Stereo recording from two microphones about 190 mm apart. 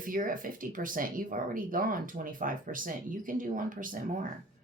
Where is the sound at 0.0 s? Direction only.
45° right (ahead or behind).